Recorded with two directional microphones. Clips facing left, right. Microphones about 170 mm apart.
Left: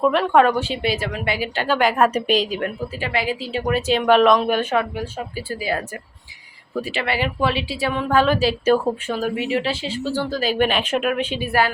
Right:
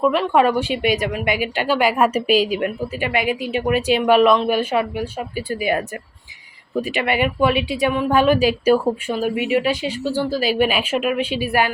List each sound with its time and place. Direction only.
0.0 s speech: centre (ahead or behind)